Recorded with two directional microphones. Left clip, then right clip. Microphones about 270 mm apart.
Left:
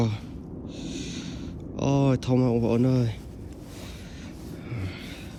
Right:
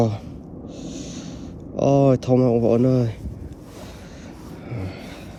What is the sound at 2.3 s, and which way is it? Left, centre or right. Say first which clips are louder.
Speech: right 7 dB; right.